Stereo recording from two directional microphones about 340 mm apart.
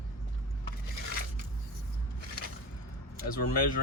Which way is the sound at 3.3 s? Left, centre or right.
Left.